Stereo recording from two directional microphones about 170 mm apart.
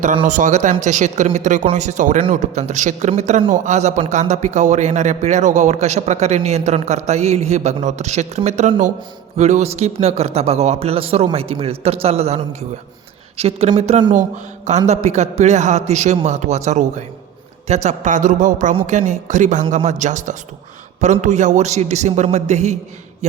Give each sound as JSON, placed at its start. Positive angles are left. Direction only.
{"t": 0.3, "sound": "a man's voice", "side_deg": -50}